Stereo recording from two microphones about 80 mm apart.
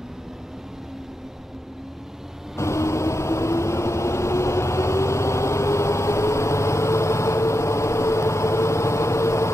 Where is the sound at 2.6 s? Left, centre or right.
Left.